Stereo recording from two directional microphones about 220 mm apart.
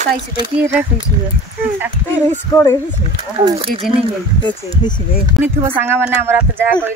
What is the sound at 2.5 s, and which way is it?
Speech, 15° left (ahead or behind).